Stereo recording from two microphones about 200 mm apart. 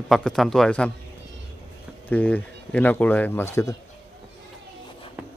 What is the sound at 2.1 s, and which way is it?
Speech, 10° left (ahead or behind).